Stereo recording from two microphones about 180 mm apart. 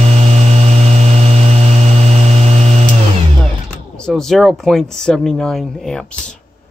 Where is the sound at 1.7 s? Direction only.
40° right (ahead or behind).